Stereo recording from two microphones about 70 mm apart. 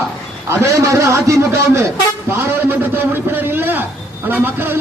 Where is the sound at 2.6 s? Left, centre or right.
Right.